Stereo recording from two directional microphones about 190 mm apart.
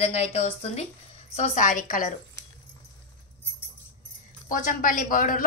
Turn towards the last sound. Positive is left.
turn(degrees=45)  # may be behind; listen again after turning